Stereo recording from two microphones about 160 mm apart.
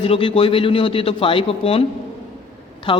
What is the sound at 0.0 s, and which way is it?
Speech, 35° left (ahead or behind).